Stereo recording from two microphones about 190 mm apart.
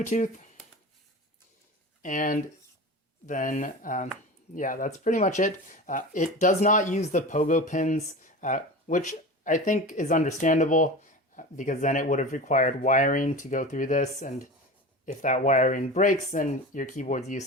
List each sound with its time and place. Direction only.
0.0 s speech: 40° left (ahead or behind)
2.0 s speech: 45° left (ahead or behind)